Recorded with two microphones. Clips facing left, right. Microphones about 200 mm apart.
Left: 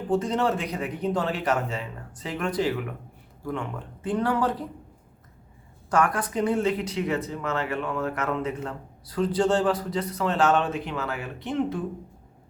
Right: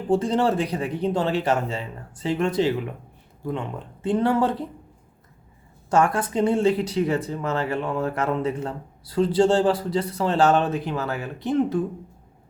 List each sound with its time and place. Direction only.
0.1 s speech: 30° right (ahead or behind)
5.9 s speech: 25° right (ahead or behind)